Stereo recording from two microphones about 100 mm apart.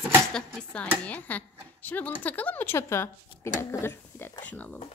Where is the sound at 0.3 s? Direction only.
10° left (ahead or behind).